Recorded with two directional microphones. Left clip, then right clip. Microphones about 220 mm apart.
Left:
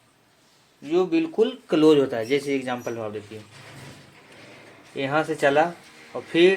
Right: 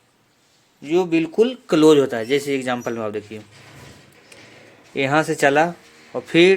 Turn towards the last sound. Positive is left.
turn(degrees=-50)  # may be behind; listen again after turning